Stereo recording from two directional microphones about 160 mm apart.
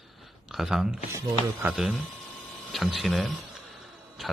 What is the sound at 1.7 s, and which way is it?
Speech, 5° right (ahead or behind).